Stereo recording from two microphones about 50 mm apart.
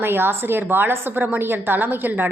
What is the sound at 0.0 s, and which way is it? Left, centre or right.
A woman's voice, right.